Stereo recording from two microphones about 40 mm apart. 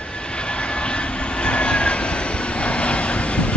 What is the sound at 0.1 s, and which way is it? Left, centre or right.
Vehicle, left.